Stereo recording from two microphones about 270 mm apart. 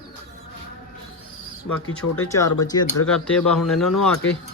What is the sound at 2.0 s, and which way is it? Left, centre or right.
Speech, left.